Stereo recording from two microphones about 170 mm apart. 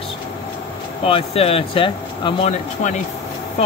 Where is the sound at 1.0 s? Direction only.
35° left (ahead or behind).